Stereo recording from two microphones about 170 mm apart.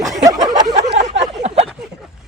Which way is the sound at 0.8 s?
45° right (ahead or behind).